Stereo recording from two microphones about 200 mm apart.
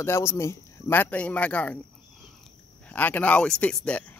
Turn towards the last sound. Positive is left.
turn(degrees=5)  # may be behind; listen again after turning